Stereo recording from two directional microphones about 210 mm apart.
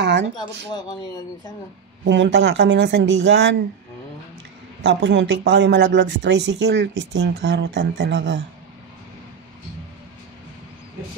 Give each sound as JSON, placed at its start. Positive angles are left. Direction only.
{"t": 0.0, "sound": "speech", "side_deg": -55}
{"t": 2.0, "sound": "speech", "side_deg": -55}
{"t": 4.8, "sound": "speech", "side_deg": -60}